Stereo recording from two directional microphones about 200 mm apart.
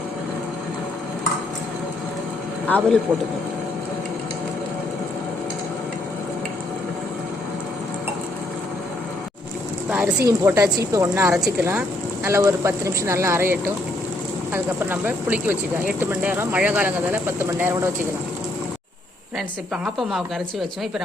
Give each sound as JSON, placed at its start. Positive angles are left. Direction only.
{"t": 2.6, "sound": "a man's voice", "side_deg": 5}
{"t": 10.2, "sound": "speech", "side_deg": -15}
{"t": 19.7, "sound": "a woman's voice", "side_deg": 0}